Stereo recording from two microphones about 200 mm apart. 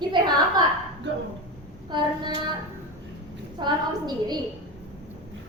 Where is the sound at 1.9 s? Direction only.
20° right (ahead or behind).